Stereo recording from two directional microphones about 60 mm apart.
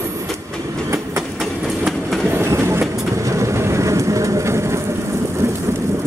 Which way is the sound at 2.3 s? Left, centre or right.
Right.